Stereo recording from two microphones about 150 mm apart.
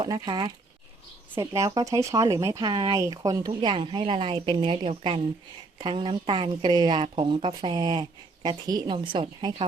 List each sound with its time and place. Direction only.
0.0 s speech: 30° right (ahead or behind)